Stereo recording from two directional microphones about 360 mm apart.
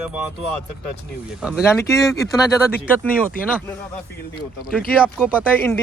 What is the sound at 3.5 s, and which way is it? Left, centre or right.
Speech, centre.